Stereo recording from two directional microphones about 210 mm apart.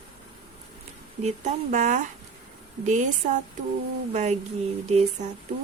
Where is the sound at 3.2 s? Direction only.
40° right (ahead or behind).